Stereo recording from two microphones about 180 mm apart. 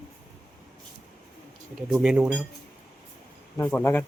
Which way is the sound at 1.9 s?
5° right (ahead or behind).